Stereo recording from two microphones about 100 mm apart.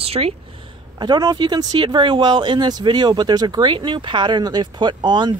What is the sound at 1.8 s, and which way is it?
Speech, 55° right (ahead or behind).